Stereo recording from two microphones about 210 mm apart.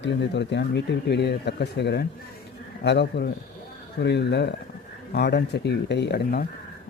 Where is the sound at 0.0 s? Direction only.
55° left (ahead or behind).